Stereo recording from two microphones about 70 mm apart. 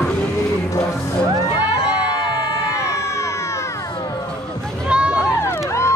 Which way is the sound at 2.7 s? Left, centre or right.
Left.